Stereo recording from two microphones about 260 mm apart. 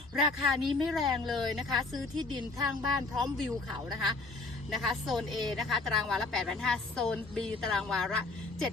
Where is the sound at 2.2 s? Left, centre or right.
Centre.